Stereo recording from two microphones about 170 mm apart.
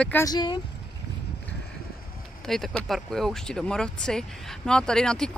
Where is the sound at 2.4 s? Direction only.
Centre (ahead or behind).